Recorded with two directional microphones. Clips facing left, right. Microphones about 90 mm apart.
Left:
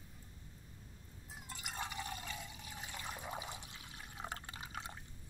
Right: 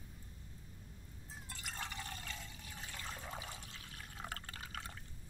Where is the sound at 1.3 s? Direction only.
15° left (ahead or behind).